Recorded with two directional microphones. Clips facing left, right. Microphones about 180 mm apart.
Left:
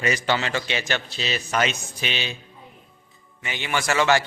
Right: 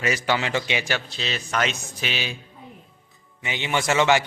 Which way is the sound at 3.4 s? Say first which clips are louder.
Right 2 dB; 20° right (ahead or behind).